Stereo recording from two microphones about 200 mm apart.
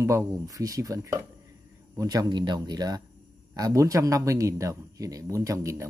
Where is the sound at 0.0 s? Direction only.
15° right (ahead or behind).